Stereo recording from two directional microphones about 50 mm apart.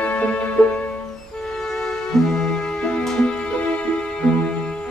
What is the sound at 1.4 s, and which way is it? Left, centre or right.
Music, centre.